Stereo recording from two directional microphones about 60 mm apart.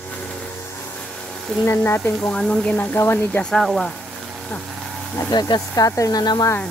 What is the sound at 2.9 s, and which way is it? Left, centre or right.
Speech, left.